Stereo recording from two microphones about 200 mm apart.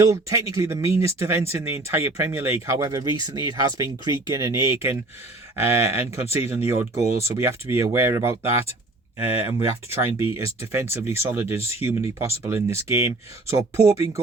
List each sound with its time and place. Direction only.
0.0 s speech: 15° right (ahead or behind)